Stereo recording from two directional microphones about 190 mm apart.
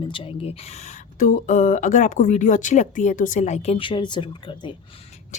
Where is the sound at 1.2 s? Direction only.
45° left (ahead or behind); by 4.7 s 25° left (ahead or behind).